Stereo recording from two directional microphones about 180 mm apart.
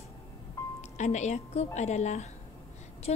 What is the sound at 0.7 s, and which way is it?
Speech, 40° left (ahead or behind).